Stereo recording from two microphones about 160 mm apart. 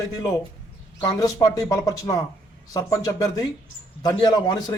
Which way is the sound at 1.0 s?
20° left (ahead or behind).